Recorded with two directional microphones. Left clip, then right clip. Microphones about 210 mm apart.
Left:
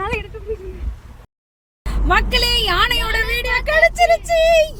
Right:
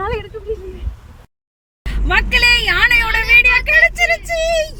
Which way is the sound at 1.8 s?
5° left (ahead or behind).